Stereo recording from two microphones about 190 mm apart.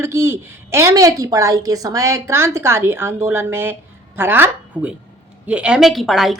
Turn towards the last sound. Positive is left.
turn(degrees=0)  # may be behind; listen again after turning